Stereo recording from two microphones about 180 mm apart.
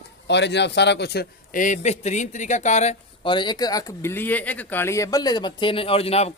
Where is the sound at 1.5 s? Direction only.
40° left (ahead or behind).